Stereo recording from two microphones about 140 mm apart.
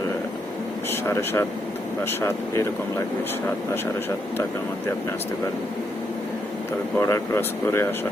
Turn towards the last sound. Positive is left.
turn(degrees=20)  # may be behind; listen again after turning